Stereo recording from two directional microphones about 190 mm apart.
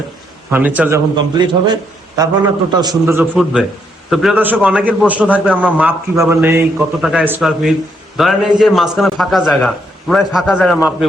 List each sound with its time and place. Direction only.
0.5 s a man's voice: 10° right (ahead or behind)
1.1 s a man's voice: 25° right (ahead or behind)
3.3 s a man's voice: centre (ahead or behind)